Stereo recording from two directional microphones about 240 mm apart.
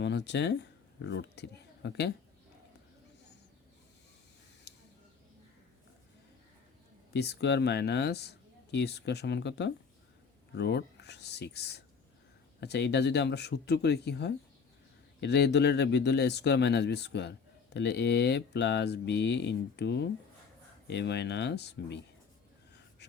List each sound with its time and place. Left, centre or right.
0.0 s speech: left
7.1 s speech: left